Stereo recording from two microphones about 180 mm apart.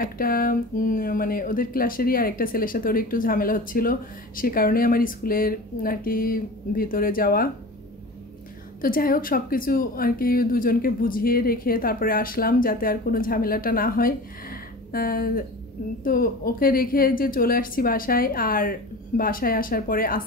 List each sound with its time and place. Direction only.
0.0 s speech: 55° left (ahead or behind)
8.8 s speech: 50° left (ahead or behind)